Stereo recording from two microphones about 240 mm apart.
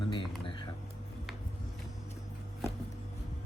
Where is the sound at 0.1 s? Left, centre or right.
Centre.